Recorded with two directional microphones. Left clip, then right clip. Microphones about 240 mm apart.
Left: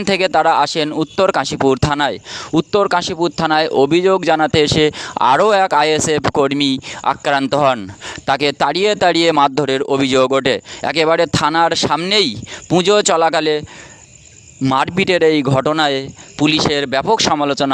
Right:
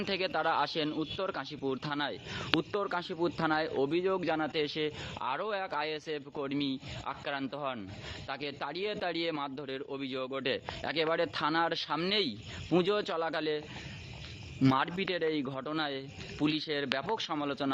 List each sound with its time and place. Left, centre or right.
0.0 s speech: left
14.6 s speech: left